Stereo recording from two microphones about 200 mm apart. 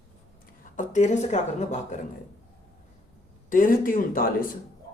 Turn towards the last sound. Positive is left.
turn(degrees=45)  # may be behind; listen again after turning